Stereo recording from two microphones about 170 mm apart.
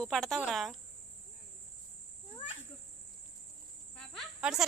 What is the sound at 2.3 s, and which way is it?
Cricket, 30° left (ahead or behind).